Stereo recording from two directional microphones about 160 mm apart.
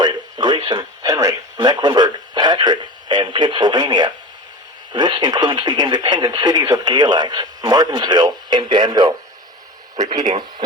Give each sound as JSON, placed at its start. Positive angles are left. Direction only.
{"t": 0.0, "sound": "radio", "side_deg": -25}
{"t": 1.5, "sound": "speech", "side_deg": -25}